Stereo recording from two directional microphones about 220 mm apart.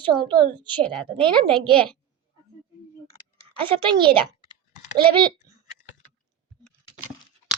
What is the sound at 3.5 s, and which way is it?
A child's voice, 25° right (ahead or behind).